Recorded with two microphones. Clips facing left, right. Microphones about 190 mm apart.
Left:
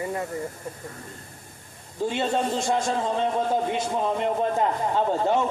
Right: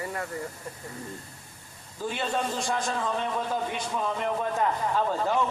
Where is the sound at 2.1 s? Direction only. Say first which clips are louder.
Left 4 dB; 25° left (ahead or behind).